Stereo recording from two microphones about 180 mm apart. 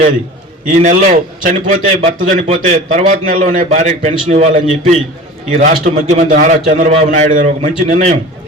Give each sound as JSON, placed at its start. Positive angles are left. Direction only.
{"t": 0.7, "sound": "a man's voice", "side_deg": -40}